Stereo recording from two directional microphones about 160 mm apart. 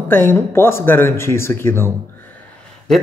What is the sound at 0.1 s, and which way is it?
Speech, 15° left (ahead or behind).